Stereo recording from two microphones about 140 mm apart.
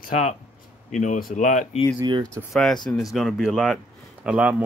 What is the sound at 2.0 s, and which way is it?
Speech, 35° right (ahead or behind).